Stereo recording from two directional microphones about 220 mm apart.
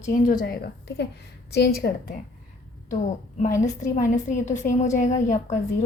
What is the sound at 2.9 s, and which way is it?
A woman's voice, 35° left (ahead or behind).